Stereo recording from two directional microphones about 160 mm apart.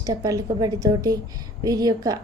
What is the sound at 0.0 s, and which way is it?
A woman's voice, 20° right (ahead or behind).